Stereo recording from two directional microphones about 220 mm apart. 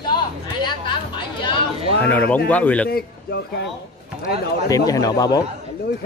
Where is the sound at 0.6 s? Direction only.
20° left (ahead or behind).